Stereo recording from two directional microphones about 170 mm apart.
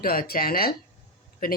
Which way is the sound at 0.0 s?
60° left (ahead or behind).